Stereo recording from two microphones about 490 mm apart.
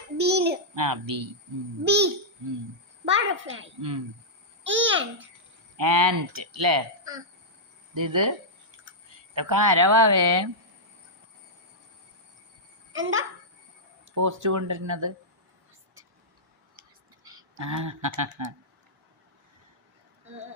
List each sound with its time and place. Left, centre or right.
0.2 s a sound: centre
0.8 s a woman's voice: right
1.8 s a child's voice: centre
3.1 s a child's voice: right
3.8 s a woman's voice: right
4.6 s a child's voice: right
5.7 s a woman's voice: right
7.9 s a woman's voice: right
12.9 s speech: right
14.2 s a woman's voice: right
17.3 s a sound: right